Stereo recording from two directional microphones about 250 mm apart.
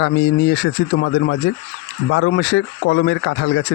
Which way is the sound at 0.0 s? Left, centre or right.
Left.